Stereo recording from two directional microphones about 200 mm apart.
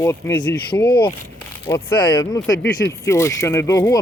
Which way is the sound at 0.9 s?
20° left (ahead or behind).